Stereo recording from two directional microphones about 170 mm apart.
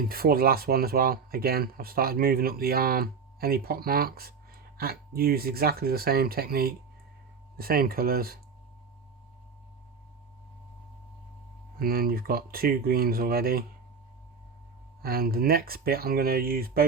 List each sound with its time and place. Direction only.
0.1 s speech: 60° right (ahead or behind)
11.8 s speech: 60° right (ahead or behind)
15.0 s speech: 60° right (ahead or behind)